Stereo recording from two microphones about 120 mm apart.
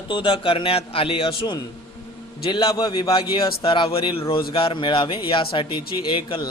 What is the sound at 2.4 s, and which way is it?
Speech, 35° left (ahead or behind).